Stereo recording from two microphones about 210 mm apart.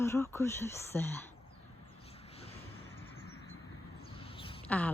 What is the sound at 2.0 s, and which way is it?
Vehicle, 30° left (ahead or behind).